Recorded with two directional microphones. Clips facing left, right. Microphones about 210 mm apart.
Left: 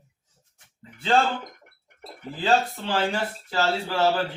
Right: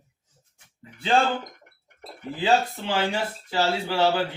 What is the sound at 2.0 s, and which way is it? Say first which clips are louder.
A man's voice: right 2 dB; 15° right (ahead or behind).